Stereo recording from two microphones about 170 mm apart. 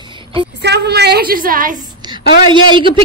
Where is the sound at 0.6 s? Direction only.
75° right (ahead or behind); by 1.8 s 55° right (ahead or behind).